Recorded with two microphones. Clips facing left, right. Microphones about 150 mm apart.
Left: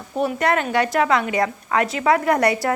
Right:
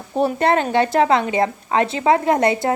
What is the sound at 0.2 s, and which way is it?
Speech, 30° right (ahead or behind).